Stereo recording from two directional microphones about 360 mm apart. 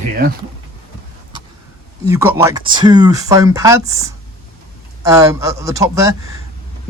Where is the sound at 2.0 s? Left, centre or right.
Centre.